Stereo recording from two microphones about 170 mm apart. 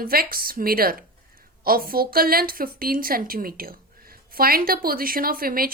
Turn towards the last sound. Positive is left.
turn(degrees=-60)  # may be behind; listen again after turning